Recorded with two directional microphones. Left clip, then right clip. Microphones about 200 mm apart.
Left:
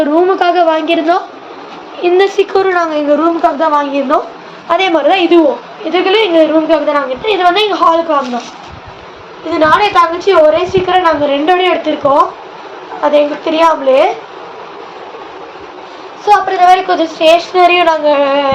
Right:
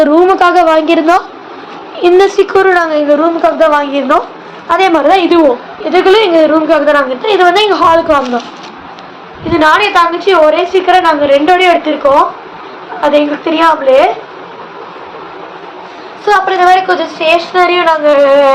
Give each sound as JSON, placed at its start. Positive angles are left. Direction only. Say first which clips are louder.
{"t": 0.0, "sound": "a woman's voice", "louder": "right 4 dB", "side_deg": -20}
{"t": 9.5, "sound": "a woman's voice", "louder": "right 1 dB", "side_deg": -15}
{"t": 13.0, "sound": "a woman's voice", "louder": "right 1 dB", "side_deg": -15}
{"t": 16.2, "sound": "a woman's voice", "louder": "even", "side_deg": -20}
{"t": 16.7, "sound": "a woman's voice", "louder": "right 1 dB", "side_deg": -10}